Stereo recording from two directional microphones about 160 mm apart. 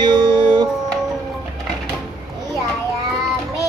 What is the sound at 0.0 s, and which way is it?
Music, 25° right (ahead or behind).